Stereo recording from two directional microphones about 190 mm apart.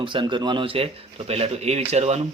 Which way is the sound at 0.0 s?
25° right (ahead or behind).